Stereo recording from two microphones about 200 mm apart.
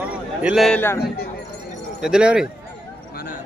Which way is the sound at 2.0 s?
5° right (ahead or behind).